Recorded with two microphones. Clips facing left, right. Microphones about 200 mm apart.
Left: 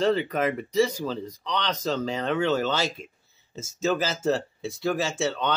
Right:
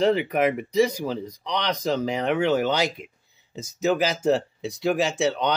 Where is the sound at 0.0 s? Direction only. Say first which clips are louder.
Right 3 dB; 15° right (ahead or behind).